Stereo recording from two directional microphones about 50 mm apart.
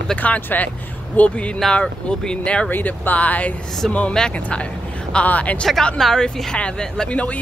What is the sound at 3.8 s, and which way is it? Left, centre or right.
Speech, centre.